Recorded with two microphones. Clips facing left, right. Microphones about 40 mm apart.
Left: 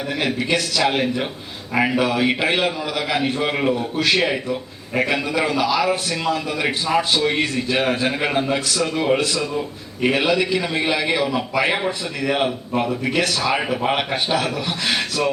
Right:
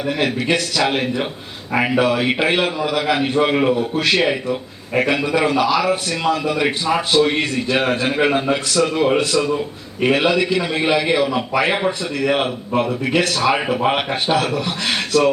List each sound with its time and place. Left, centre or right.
0.1 s a man's voice: centre